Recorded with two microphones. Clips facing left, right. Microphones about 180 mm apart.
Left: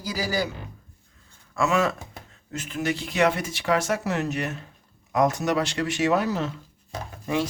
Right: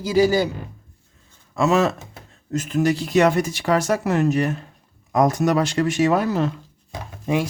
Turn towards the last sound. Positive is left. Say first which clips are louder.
# right 4 dB
turn(degrees=-15)  # may be behind; listen again after turning